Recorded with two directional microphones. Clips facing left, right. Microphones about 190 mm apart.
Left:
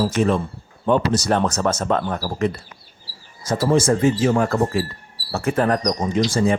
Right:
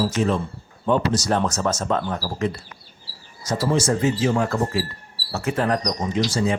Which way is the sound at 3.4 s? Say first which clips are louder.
Left 4 dB; 55° left (ahead or behind).